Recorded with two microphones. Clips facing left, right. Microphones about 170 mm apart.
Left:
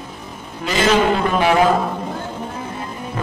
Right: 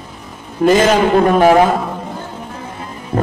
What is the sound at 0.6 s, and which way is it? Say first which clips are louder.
A man's voice: right 6 dB; 50° right (ahead or behind).